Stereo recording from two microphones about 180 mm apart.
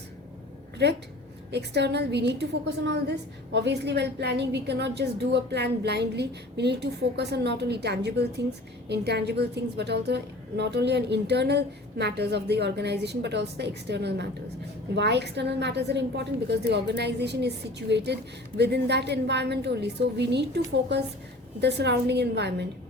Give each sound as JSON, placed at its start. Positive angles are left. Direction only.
{"t": 0.8, "sound": "a woman's voice", "side_deg": -70}
{"t": 21.6, "sound": "a woman's voice", "side_deg": -70}